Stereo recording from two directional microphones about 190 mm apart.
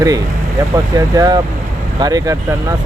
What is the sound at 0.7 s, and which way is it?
Speech, 20° right (ahead or behind).